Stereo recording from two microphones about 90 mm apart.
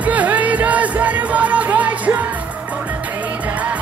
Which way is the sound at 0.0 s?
15° right (ahead or behind).